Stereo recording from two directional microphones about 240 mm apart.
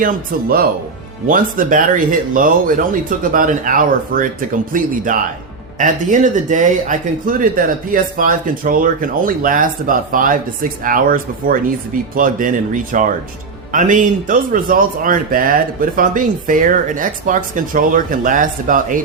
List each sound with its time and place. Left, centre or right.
0.0 s speech: right